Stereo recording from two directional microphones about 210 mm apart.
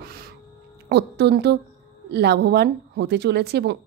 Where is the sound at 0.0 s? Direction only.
45° right (ahead or behind).